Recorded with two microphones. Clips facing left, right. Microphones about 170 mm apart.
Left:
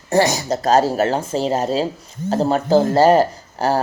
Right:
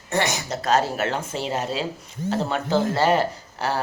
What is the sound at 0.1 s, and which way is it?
Speech, 35° left (ahead or behind).